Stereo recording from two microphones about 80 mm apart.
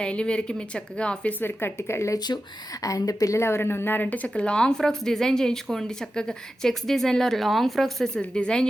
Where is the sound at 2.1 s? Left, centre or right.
Left.